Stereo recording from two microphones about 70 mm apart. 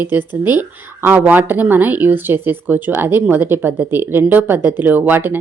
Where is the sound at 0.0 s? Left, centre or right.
Right.